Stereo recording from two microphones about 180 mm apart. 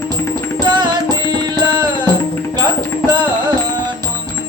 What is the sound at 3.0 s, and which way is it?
Music, 25° right (ahead or behind).